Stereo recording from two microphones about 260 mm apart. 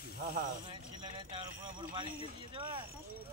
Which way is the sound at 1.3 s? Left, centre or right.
Centre.